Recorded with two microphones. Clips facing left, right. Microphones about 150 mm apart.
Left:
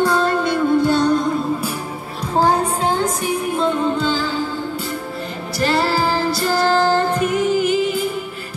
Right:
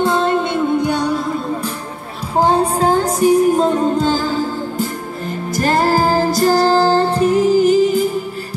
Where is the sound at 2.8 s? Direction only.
40° right (ahead or behind).